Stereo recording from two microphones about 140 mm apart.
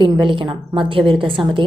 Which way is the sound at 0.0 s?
35° right (ahead or behind).